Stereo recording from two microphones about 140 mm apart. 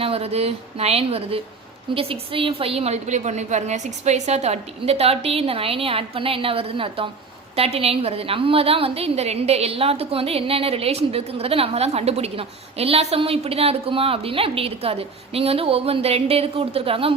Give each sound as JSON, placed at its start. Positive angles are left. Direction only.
{"t": 0.0, "sound": "a woman's voice", "side_deg": -45}